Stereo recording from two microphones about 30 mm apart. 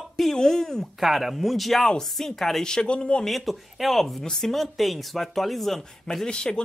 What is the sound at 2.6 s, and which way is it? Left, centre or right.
Speech, left.